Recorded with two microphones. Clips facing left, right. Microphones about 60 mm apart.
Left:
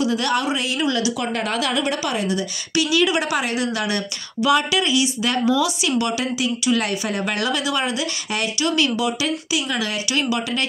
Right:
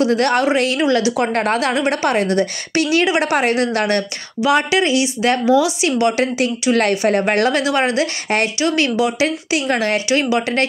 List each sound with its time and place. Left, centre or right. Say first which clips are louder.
0.0 s speech: right 5 dB; right
4.5 s a woman's voice: right 3 dB; right
5.4 s a woman's voice: right 3 dB; right
9.7 s speech: right 7 dB; right
10.0 s speech: right 6 dB; right